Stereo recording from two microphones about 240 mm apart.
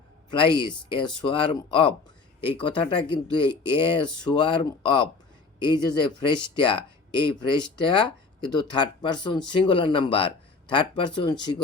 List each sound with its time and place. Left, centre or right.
0.3 s speech: centre